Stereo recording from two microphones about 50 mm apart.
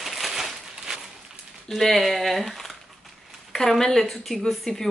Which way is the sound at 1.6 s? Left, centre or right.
Centre.